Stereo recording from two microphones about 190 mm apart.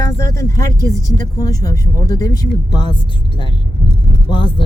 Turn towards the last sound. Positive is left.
turn(degrees=25)  # may be behind; listen again after turning